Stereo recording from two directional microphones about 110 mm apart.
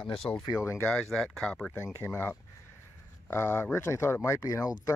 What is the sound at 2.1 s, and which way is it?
Speech, 20° left (ahead or behind).